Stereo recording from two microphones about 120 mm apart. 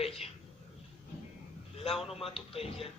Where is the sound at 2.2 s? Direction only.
50° left (ahead or behind).